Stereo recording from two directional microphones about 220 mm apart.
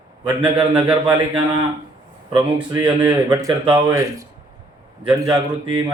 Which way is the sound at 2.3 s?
20° right (ahead or behind).